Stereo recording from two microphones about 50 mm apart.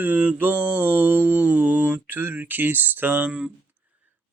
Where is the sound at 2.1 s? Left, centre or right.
Right.